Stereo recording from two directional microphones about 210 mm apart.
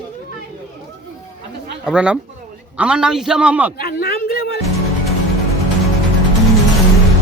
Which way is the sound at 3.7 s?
45° left (ahead or behind).